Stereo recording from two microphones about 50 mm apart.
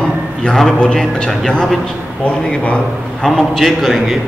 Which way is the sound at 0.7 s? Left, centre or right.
Centre.